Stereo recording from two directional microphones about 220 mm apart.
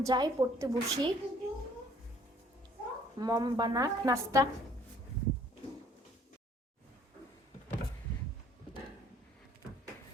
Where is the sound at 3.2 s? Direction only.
15° right (ahead or behind).